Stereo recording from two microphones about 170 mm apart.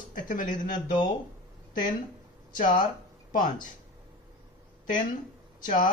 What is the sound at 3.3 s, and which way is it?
Speech, 50° left (ahead or behind).